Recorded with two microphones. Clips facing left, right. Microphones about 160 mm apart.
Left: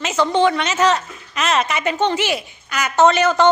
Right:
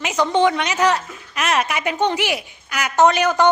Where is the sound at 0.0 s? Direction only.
15° right (ahead or behind).